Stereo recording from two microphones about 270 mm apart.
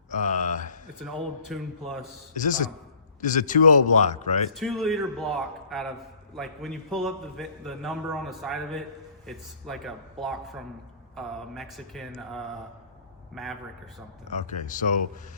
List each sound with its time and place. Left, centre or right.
0.1 s a sound: left
0.9 s a man's voice: centre
2.3 s speech: left
4.5 s a man's voice: centre
14.3 s speech: left